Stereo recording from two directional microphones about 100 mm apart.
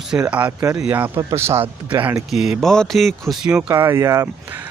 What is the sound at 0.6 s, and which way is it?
Speech, 35° right (ahead or behind).